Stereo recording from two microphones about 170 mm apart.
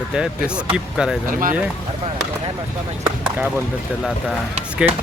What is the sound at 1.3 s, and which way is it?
Speech, 55° right (ahead or behind).